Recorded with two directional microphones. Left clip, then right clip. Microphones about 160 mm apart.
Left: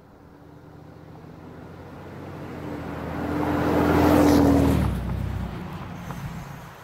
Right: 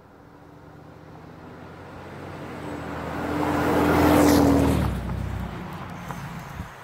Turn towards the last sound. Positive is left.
turn(degrees=15)  # may be behind; listen again after turning